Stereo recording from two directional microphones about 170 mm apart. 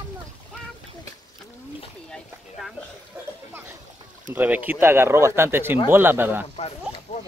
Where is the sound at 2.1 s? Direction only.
Centre (ahead or behind).